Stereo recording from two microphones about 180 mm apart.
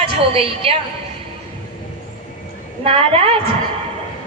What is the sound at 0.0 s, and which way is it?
Speech, 30° right (ahead or behind).